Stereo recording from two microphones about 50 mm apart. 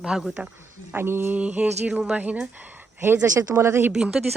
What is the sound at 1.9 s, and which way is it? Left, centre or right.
Speech, centre.